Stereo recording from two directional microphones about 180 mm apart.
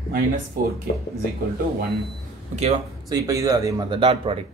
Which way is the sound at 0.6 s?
55° right (ahead or behind).